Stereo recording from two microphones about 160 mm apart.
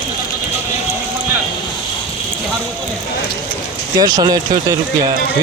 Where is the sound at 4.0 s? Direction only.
25° right (ahead or behind).